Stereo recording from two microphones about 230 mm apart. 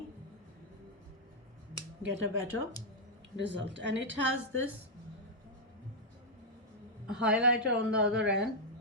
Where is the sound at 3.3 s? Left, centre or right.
Right.